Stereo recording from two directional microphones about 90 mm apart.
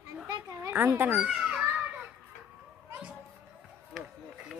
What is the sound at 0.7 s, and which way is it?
Speech, 20° right (ahead or behind).